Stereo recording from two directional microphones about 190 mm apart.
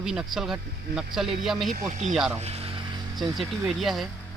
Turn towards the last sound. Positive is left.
turn(degrees=0)  # may be behind; listen again after turning